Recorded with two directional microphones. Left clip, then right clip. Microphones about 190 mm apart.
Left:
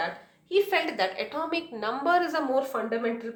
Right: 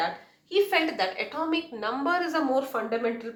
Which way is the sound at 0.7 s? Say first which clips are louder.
Right 1 dB; 45° left (ahead or behind).